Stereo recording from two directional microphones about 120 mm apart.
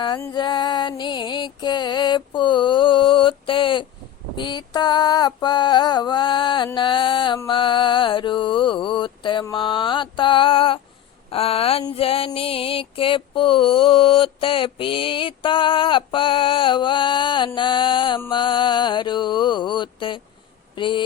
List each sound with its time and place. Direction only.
0.3 s music: 40° left (ahead or behind)